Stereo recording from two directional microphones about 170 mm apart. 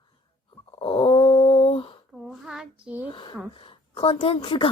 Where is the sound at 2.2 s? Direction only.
5° right (ahead or behind).